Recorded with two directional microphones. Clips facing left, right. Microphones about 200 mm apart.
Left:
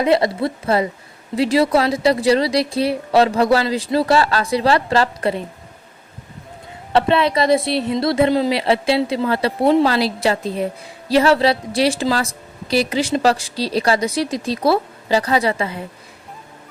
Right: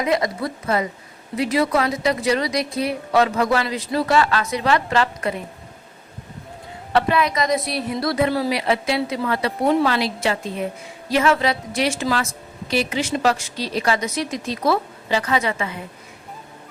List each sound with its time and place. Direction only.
0.0 s a woman's voice: 30° left (ahead or behind)
6.9 s a woman's voice: 30° left (ahead or behind)